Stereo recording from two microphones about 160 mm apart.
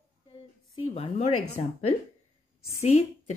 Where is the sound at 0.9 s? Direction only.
40° left (ahead or behind).